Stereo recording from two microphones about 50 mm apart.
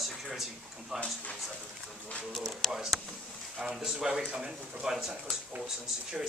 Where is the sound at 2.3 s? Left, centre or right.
Centre.